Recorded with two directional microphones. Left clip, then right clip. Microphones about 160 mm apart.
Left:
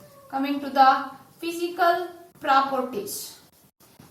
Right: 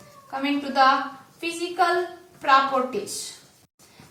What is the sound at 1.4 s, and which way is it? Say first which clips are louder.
Speech: right 1 dB; 20° right (ahead or behind).